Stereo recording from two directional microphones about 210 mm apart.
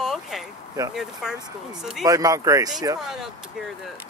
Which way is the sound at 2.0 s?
15° right (ahead or behind).